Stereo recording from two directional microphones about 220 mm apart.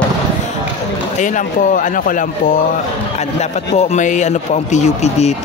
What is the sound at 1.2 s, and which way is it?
Speech, 35° left (ahead or behind).